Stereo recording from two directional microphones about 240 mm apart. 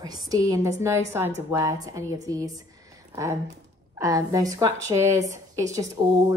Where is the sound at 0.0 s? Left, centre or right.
Centre.